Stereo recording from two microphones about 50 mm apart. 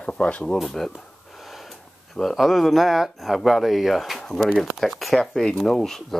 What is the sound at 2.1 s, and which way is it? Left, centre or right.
Speech, centre.